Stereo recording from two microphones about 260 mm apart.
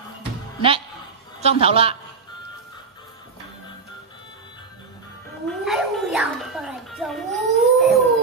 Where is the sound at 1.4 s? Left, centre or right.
Right.